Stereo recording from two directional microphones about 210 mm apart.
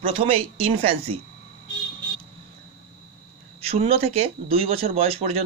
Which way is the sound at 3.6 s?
25° right (ahead or behind).